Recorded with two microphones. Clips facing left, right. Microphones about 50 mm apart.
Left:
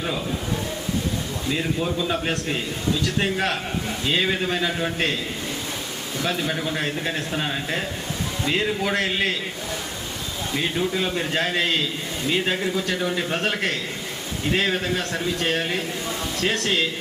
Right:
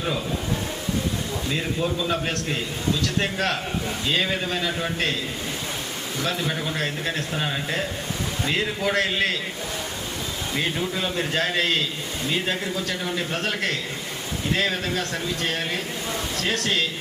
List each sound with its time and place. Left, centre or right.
1.5 s a man's voice: centre
6.7 s a man's voice: centre
10.8 s a man's voice: centre
11.3 s a man's voice: centre
15.1 s a man's voice: centre